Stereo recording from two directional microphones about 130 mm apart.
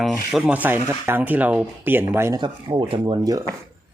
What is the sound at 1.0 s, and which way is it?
Speech, 15° right (ahead or behind).